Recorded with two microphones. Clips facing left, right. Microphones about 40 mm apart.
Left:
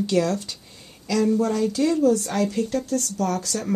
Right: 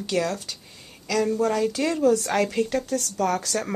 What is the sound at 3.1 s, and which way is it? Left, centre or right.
Speech, right.